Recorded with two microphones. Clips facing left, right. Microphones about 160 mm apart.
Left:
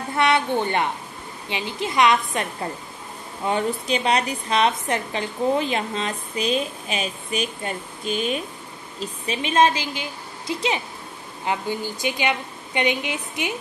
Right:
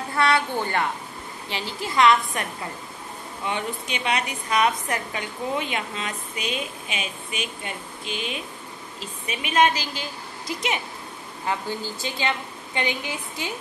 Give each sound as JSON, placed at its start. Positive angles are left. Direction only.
{"t": 0.1, "sound": "a woman's voice", "side_deg": 20}
{"t": 3.4, "sound": "a woman's voice", "side_deg": 35}
{"t": 9.3, "sound": "a woman's voice", "side_deg": 30}
{"t": 11.4, "sound": "a woman's voice", "side_deg": 15}